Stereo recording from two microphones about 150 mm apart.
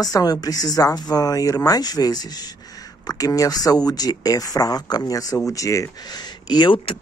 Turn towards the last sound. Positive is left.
turn(degrees=30)  # may be behind; listen again after turning